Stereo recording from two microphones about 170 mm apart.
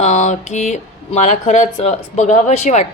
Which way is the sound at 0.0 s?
40° left (ahead or behind).